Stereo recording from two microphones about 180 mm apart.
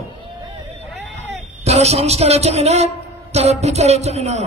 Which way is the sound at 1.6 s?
35° right (ahead or behind).